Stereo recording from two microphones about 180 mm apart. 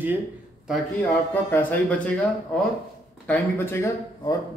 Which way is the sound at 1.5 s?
10° left (ahead or behind).